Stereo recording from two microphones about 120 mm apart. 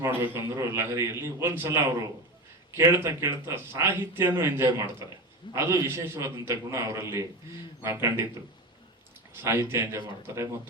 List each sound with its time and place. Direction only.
0.0 s speech: 25° right (ahead or behind)
9.4 s speech: 20° right (ahead or behind)